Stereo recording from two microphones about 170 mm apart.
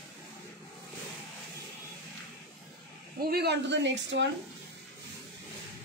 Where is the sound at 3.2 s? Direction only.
65° right (ahead or behind); by 4.3 s 90° right.